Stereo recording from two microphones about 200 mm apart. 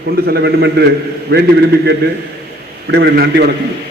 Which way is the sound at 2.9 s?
55° right (ahead or behind).